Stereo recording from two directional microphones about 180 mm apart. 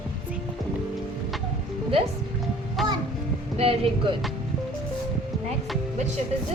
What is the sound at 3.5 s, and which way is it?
Speech, 35° right (ahead or behind).